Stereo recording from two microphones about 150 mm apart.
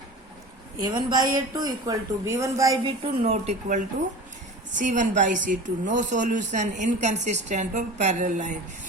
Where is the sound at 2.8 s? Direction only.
40° right (ahead or behind).